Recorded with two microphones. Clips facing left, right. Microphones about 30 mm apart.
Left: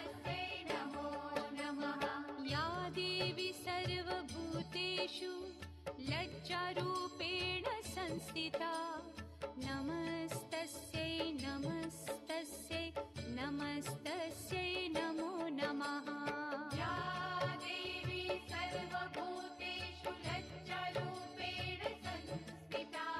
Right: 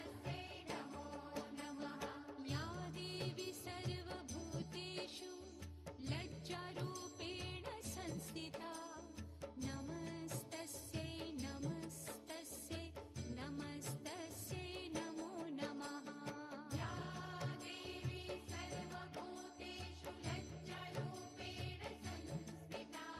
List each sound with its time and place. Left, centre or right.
0.0 s music: left